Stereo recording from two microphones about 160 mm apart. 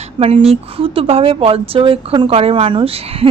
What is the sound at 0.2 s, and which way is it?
A woman's voice, 40° right (ahead or behind).